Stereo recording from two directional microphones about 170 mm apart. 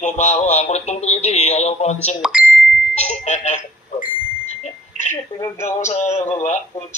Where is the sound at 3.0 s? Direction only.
40° left (ahead or behind).